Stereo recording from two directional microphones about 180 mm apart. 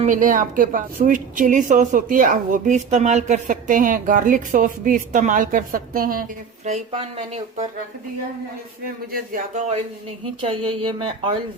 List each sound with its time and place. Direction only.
0.0 s a woman's voice: 45° right (ahead or behind)
6.7 s speech: 40° right (ahead or behind)
8.8 s a woman's voice: 50° right (ahead or behind)
10.5 s speech: 30° right (ahead or behind)